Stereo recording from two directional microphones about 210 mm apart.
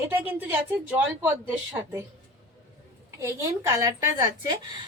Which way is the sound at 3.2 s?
15° right (ahead or behind).